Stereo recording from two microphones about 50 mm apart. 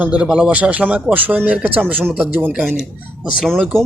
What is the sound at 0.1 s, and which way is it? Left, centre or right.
Speech, right.